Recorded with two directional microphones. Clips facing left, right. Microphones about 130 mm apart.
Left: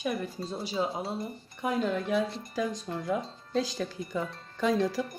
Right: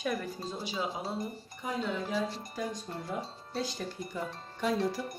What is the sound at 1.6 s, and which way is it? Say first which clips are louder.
Speech: left 6 dB; 65° left (ahead or behind).